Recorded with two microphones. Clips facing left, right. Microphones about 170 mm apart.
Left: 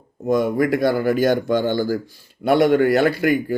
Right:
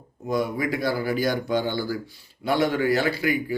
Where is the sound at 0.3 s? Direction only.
50° left (ahead or behind).